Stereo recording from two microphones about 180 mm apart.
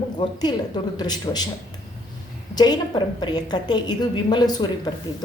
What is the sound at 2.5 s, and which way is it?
A woman's voice, 25° left (ahead or behind).